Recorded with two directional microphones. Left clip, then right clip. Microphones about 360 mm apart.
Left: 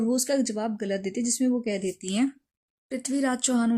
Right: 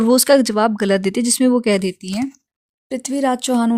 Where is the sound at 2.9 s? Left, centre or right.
Centre.